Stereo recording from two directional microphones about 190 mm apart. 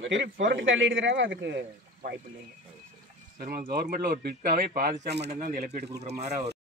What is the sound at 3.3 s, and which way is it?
Speech, 50° right (ahead or behind).